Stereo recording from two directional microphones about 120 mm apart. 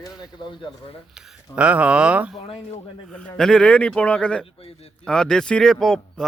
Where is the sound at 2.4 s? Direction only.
50° left (ahead or behind).